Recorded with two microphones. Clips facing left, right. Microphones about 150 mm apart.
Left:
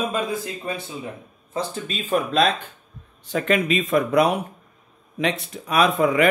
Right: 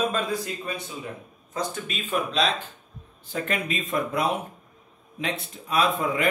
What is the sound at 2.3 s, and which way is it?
Speech, 55° left (ahead or behind).